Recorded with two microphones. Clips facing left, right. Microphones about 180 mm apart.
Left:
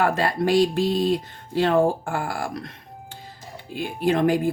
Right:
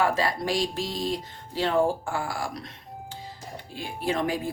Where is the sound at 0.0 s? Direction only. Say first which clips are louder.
Left 4 dB; 60° left (ahead or behind).